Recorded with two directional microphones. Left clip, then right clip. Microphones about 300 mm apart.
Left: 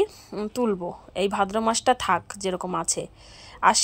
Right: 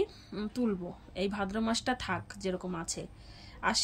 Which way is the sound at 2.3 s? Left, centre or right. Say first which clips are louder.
Left 8 dB; centre.